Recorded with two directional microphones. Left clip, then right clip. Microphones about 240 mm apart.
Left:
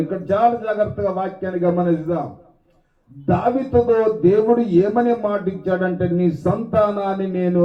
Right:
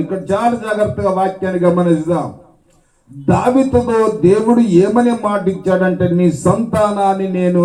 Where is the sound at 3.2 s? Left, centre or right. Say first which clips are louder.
Right 6 dB; right.